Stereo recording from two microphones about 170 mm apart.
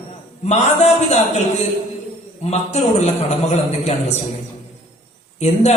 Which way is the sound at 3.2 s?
40° left (ahead or behind).